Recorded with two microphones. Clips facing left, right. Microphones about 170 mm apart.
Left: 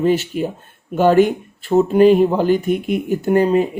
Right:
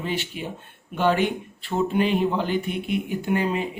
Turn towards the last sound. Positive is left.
turn(degrees=40)  # may be behind; listen again after turning